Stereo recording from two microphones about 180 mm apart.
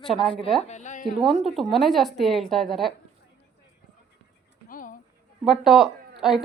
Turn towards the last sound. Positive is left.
turn(degrees=0)  # may be behind; listen again after turning